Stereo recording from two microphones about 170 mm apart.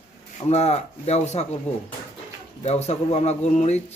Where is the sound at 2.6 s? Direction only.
40° left (ahead or behind).